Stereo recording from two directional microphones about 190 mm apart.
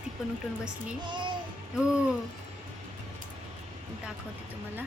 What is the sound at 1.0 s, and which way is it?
Speech, 25° right (ahead or behind).